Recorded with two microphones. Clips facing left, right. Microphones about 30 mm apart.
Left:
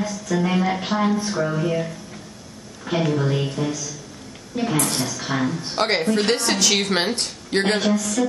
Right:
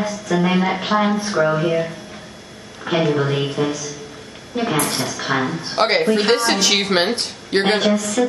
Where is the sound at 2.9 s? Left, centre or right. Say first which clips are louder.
Right 3 dB; right.